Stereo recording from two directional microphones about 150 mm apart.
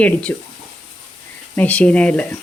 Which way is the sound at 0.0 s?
10° left (ahead or behind).